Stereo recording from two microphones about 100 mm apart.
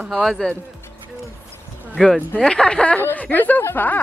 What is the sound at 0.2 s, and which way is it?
Speech, centre (ahead or behind).